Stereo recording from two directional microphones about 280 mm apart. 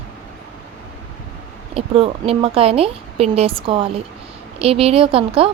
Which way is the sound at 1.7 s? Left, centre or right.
Centre.